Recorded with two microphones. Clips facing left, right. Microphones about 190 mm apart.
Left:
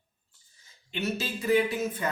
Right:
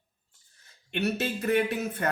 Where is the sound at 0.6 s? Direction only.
65° right (ahead or behind).